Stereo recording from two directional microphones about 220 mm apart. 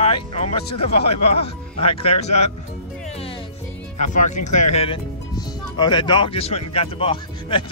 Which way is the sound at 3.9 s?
35° left (ahead or behind).